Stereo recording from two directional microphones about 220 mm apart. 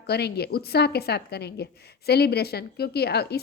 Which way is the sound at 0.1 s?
45° left (ahead or behind).